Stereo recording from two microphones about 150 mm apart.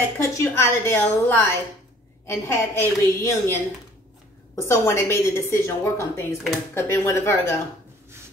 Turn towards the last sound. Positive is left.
turn(degrees=15)  # may be behind; listen again after turning